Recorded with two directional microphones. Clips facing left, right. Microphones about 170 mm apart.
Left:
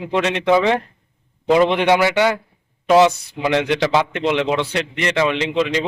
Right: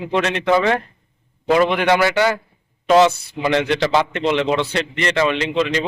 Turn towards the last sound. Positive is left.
turn(degrees=15)  # may be behind; listen again after turning